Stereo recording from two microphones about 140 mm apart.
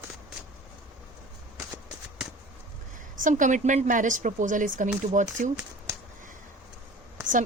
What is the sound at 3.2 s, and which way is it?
Speech, 65° right (ahead or behind).